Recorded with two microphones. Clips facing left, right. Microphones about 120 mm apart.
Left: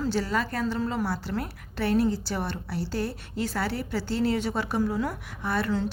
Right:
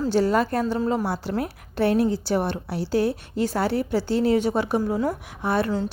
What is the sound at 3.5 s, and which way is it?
Speech, 45° right (ahead or behind).